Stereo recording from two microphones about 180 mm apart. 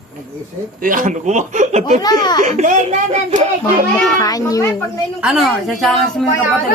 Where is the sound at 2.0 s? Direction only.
20° left (ahead or behind).